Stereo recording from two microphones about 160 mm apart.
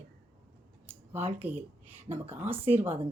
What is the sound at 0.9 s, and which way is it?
Speech, 15° right (ahead or behind).